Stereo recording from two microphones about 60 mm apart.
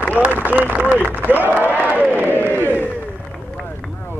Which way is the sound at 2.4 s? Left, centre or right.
Right.